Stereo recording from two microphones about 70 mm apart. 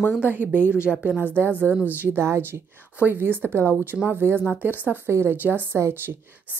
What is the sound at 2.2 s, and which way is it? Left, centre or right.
A woman's voice, right.